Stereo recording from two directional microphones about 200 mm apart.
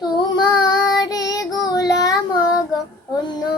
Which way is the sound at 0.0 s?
20° left (ahead or behind).